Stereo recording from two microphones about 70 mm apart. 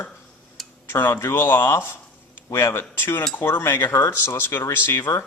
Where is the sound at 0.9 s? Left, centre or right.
Left.